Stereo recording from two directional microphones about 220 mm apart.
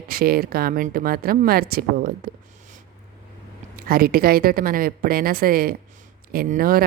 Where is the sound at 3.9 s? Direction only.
40° right (ahead or behind).